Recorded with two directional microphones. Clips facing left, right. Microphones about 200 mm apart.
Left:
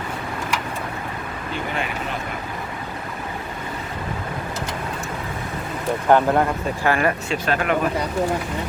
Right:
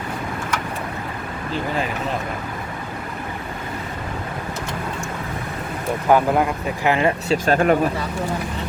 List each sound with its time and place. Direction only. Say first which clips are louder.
6.1 s speech: even; 5° right (ahead or behind)
6.8 s speech: right 2 dB; 20° right (ahead or behind)
7.3 s speech: right 5 dB; 40° right (ahead or behind)